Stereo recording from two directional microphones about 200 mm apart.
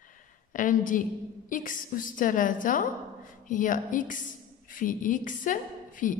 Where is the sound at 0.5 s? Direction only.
40° left (ahead or behind).